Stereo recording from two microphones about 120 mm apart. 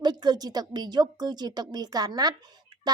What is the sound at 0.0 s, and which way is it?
A woman's voice, 35° right (ahead or behind).